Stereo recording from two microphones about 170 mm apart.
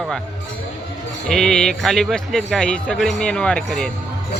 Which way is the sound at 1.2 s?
5° left (ahead or behind).